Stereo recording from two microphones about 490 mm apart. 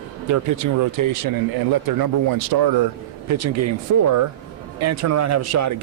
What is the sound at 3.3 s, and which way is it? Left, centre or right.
Speech, right.